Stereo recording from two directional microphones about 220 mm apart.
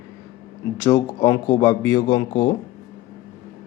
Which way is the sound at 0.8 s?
10° left (ahead or behind).